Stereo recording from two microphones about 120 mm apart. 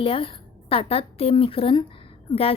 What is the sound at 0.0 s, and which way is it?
A woman's voice, 50° left (ahead or behind).